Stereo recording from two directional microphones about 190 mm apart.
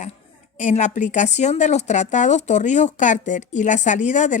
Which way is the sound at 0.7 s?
40° left (ahead or behind).